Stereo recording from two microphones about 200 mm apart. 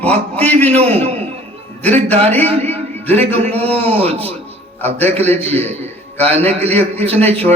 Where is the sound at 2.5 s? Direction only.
30° right (ahead or behind).